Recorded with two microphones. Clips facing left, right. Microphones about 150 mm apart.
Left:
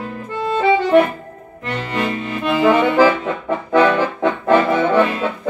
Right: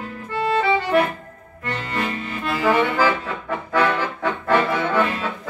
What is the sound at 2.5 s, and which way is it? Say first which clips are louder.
Accordion: left 6 dB; 20° left (ahead or behind).